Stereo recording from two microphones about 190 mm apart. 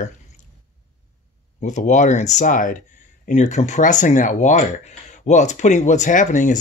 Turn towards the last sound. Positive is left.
turn(degrees=40)  # may be behind; listen again after turning